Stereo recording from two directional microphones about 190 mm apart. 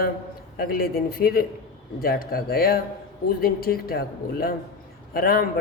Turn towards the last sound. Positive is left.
turn(degrees=50)  # may be behind; listen again after turning